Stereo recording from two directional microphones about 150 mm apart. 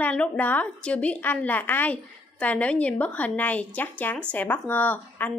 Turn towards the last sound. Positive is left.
turn(degrees=10)  # may be behind; listen again after turning